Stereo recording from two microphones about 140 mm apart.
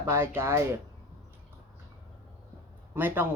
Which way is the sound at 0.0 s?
20° right (ahead or behind).